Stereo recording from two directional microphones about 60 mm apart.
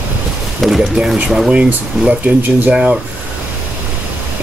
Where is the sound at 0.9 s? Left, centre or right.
Centre.